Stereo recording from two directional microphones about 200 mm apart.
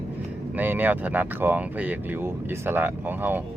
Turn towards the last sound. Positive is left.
turn(degrees=-10)  # may be behind; listen again after turning